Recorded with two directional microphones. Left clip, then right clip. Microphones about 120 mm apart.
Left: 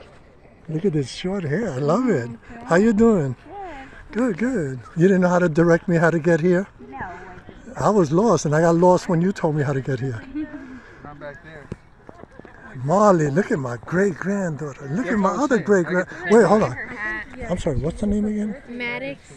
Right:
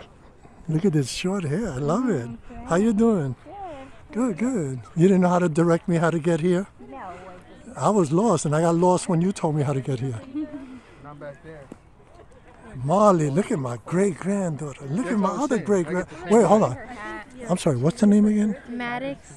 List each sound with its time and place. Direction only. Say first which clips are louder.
1.3 s speech: left 3 dB; 15° right (ahead or behind)
1.6 s speech: left 6 dB; 5° right (ahead or behind)
4.2 s speech: left 3 dB; 10° right (ahead or behind)
5.3 s speech: left 4 dB; 5° right (ahead or behind)
7.7 s speech: left 3 dB; 5° right (ahead or behind)
11.1 s a sound: left 2 dB; 50° right (ahead or behind)
12.8 s speech: left 2 dB; centre (ahead or behind)
15.1 s speech: left 5 dB; 15° left (ahead or behind)
16.3 s speech: left 2 dB; 5° right (ahead or behind)
16.9 s a sound: left 7 dB; 35° right (ahead or behind)
17.6 s speech: right 5 dB; 65° right (ahead or behind)